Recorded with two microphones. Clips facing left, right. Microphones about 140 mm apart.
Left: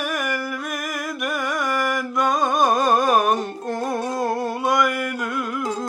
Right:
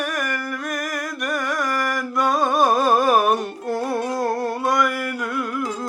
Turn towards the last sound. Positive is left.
turn(degrees=0)  # may be behind; listen again after turning